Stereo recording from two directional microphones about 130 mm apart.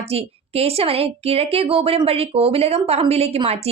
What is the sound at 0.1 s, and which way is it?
A woman's voice, 50° right (ahead or behind).